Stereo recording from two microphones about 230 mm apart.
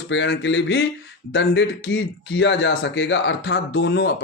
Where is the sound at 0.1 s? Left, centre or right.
Left.